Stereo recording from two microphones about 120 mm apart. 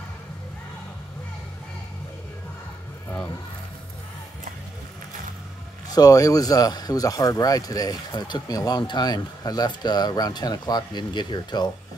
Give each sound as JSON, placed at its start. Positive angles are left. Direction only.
{"t": 5.9, "sound": "speech", "side_deg": 30}